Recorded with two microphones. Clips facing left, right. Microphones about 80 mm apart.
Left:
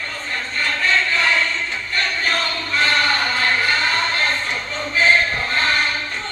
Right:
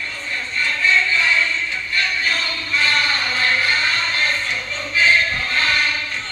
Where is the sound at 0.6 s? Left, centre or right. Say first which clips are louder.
Right 1 dB; left.